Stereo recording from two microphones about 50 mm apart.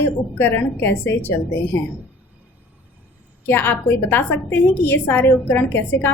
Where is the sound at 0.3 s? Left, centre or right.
Left.